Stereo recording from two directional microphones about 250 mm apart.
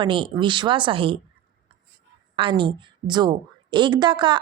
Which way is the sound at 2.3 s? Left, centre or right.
Centre.